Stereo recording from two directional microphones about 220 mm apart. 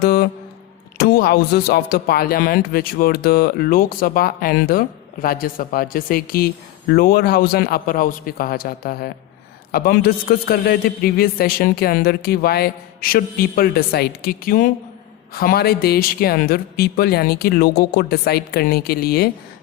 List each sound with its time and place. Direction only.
0.0 s music: 45° left (ahead or behind)
0.9 s a man's voice: 45° left (ahead or behind)